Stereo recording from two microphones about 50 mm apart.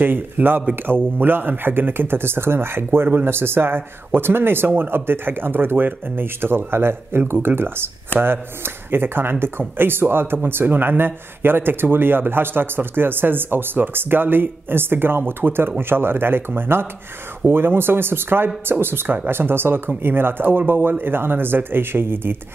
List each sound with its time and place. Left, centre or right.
0.0 s speech: right